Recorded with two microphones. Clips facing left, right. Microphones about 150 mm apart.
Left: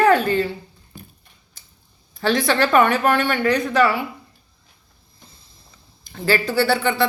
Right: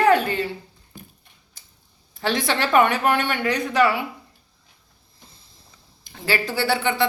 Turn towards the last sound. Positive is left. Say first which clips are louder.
# left 3 dB
turn(degrees=-20)  # may be behind; listen again after turning